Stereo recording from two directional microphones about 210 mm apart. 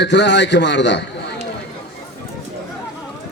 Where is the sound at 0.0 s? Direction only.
55° left (ahead or behind).